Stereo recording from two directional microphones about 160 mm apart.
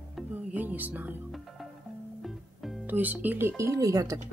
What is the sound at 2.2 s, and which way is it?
Music, centre (ahead or behind).